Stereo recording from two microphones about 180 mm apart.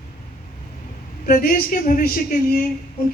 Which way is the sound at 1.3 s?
50° left (ahead or behind).